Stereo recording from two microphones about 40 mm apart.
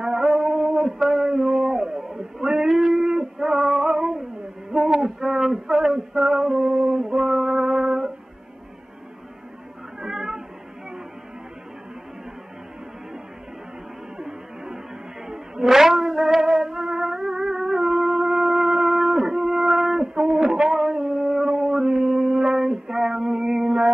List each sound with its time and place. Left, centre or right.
0.0 s a sound: centre
5.0 s male singing: centre
9.9 s cat: centre
14.1 s music: centre